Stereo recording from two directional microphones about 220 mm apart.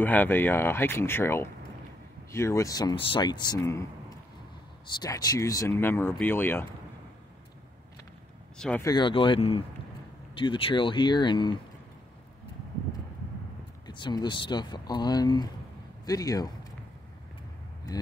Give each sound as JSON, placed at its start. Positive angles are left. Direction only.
{"t": 0.0, "sound": "speech", "side_deg": 10}
{"t": 5.0, "sound": "speech", "side_deg": 15}
{"t": 8.5, "sound": "speech", "side_deg": 5}
{"t": 8.8, "sound": "speech", "side_deg": 20}
{"t": 13.8, "sound": "speech", "side_deg": 20}
{"t": 17.9, "sound": "speech", "side_deg": 15}